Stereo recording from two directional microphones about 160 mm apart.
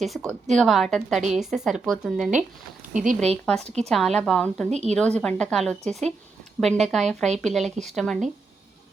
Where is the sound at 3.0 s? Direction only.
45° right (ahead or behind).